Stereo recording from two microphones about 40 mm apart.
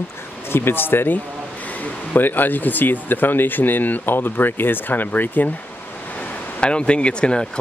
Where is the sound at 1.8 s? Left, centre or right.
Left.